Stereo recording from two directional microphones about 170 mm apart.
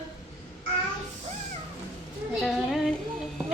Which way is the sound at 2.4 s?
Centre (ahead or behind).